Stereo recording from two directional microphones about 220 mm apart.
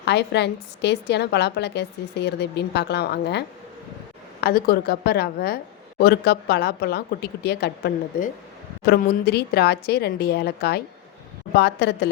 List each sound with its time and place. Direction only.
0.0 s a woman's voice: 50° left (ahead or behind)